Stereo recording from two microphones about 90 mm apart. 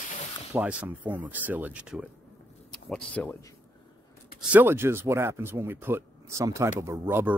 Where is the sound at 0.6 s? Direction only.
15° right (ahead or behind).